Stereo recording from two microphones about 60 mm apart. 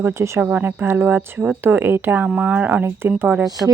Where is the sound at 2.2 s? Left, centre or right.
Right.